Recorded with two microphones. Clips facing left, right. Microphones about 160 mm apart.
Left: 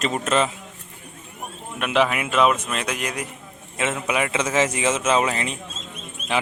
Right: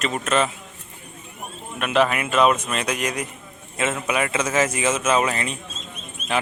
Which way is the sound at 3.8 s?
15° left (ahead or behind).